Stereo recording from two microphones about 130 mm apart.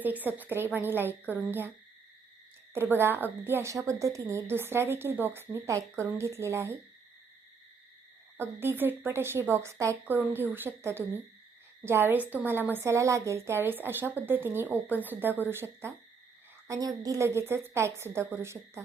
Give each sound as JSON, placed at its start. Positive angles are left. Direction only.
{"t": 0.0, "sound": "a woman's voice", "side_deg": -15}
{"t": 2.7, "sound": "a woman's voice", "side_deg": -15}
{"t": 8.4, "sound": "a woman's voice", "side_deg": -15}